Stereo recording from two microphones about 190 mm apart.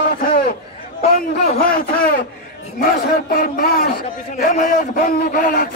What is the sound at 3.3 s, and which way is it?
A man's voice, 50° left (ahead or behind).